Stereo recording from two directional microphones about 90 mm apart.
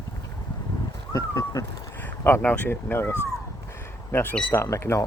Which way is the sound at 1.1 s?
35° left (ahead or behind).